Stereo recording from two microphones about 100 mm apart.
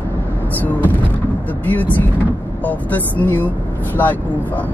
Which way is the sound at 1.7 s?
20° left (ahead or behind).